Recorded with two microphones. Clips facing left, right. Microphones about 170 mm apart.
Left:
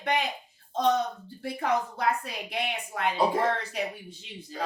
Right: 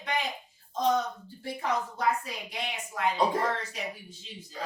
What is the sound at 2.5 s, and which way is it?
Speech, 65° left (ahead or behind).